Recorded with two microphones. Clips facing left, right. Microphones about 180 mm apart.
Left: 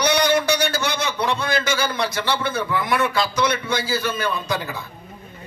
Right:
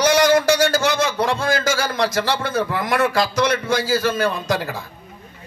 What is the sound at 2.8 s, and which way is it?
Speech, 90° right.